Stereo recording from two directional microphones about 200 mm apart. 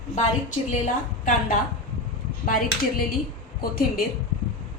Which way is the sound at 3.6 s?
45° left (ahead or behind).